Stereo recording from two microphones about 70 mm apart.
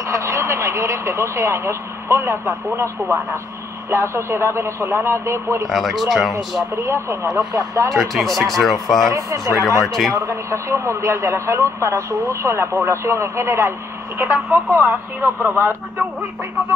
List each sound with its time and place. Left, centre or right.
0.0 s a man's voice: right
5.7 s speech: centre
6.8 s a man's voice: right
7.9 s speech: centre
9.1 s speech: right
10.0 s speech: centre
10.3 s a man's voice: right